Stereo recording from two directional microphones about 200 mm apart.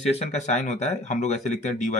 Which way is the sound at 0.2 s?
35° left (ahead or behind).